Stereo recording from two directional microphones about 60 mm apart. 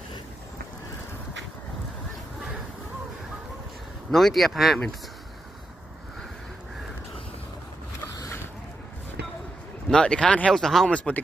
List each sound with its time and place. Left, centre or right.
4.1 s speech: centre
9.8 s speech: centre
10.5 s speech: centre